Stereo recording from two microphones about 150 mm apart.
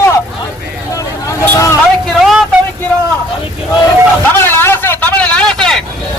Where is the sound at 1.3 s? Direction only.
20° left (ahead or behind).